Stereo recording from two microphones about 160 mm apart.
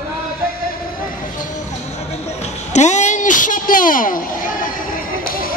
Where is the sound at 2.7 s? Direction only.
45° left (ahead or behind).